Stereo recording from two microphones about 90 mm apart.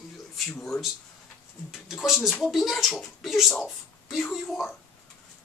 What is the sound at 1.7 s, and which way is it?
Speech, 5° right (ahead or behind).